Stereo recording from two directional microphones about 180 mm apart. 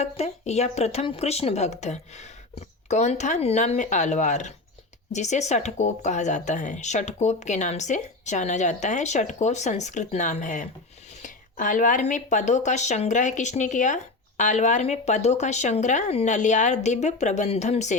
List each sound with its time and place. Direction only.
0.0 s speech: 35° left (ahead or behind)